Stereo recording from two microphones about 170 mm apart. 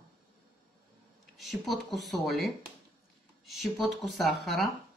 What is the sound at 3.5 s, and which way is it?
Speech, centre (ahead or behind).